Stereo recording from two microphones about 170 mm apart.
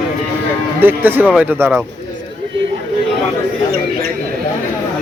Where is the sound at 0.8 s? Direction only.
10° right (ahead or behind).